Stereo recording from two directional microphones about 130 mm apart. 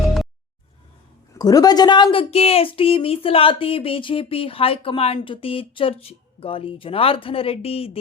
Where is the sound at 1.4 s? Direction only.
30° left (ahead or behind); by 8.0 s 50° left (ahead or behind).